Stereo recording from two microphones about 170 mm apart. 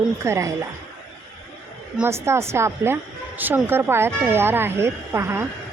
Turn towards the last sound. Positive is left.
turn(degrees=-15)  # may be behind; listen again after turning